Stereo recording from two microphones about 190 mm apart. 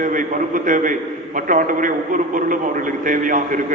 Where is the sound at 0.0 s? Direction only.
45° right (ahead or behind).